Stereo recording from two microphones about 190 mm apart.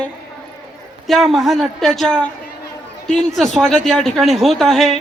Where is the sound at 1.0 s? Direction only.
Centre (ahead or behind).